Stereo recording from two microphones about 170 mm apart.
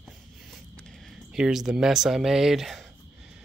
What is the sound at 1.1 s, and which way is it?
Speech, centre (ahead or behind).